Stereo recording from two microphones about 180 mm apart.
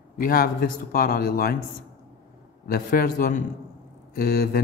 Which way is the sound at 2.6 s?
55° left (ahead or behind).